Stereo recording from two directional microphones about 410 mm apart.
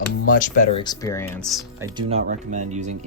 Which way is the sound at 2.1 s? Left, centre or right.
Centre.